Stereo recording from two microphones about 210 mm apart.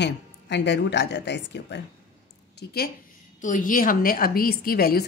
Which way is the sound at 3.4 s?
40° left (ahead or behind).